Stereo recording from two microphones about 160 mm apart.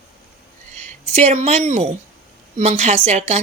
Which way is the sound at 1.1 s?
40° right (ahead or behind).